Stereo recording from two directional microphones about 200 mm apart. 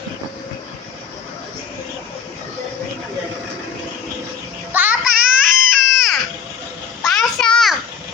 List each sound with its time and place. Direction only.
4.7 s child singing: 10° right (ahead or behind)
5.1 s baby cry: 40° right (ahead or behind)
5.9 s a sound: centre (ahead or behind)